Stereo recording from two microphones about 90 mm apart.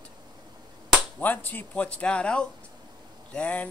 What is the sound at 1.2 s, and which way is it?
A man's voice, 20° left (ahead or behind).